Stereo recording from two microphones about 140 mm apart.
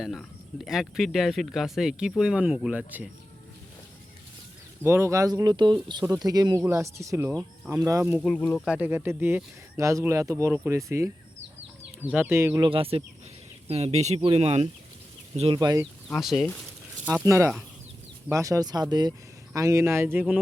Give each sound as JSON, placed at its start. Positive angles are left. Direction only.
{"t": 0.0, "sound": "speech", "side_deg": 0}
{"t": 4.8, "sound": "speech", "side_deg": -20}
{"t": 8.4, "sound": "speech", "side_deg": 15}
{"t": 8.6, "sound": "speech", "side_deg": -10}
{"t": 12.6, "sound": "speech", "side_deg": -40}
{"t": 15.5, "sound": "speech", "side_deg": -25}
{"t": 16.2, "sound": "speech", "side_deg": 0}
{"t": 17.2, "sound": "speech", "side_deg": -20}